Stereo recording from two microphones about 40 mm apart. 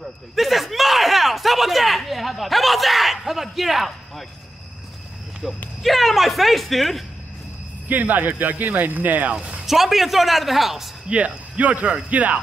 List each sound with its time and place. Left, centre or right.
0.4 s speech: centre
5.4 s speech: centre
5.8 s speech: centre
7.9 s speech: right
9.7 s speech: centre
11.1 s speech: right